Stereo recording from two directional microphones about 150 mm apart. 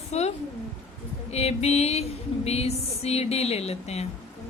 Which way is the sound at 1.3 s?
45° left (ahead or behind).